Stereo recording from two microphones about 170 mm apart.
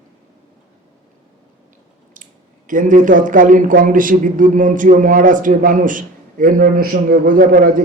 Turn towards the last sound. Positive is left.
turn(degrees=-55)  # may be behind; listen again after turning